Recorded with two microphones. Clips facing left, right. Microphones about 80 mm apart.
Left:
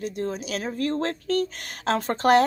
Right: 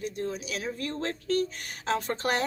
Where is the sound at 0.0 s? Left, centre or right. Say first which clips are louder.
Left 4 dB; left.